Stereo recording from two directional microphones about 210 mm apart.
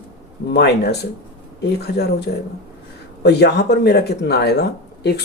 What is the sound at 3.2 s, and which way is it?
Speech, 50° left (ahead or behind).